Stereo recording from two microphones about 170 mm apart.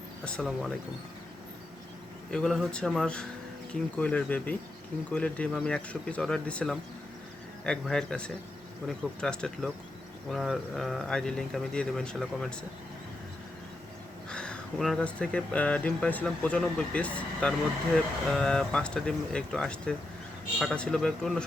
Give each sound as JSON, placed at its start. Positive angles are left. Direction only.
{"t": 0.3, "sound": "speech", "side_deg": 5}
{"t": 2.3, "sound": "speech", "side_deg": 0}
{"t": 14.3, "sound": "speech", "side_deg": 5}